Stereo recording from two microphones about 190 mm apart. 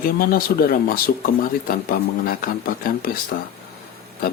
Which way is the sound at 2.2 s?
50° left (ahead or behind).